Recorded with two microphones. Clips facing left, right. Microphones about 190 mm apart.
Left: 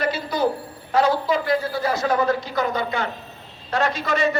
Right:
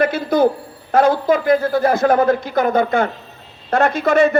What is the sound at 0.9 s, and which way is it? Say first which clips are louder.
A man's voice: right 5 dB; 50° right (ahead or behind).